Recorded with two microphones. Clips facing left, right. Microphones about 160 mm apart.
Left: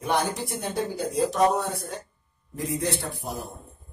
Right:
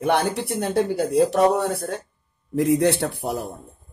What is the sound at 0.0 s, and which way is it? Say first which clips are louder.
A man's voice: right 5 dB; 65° right (ahead or behind).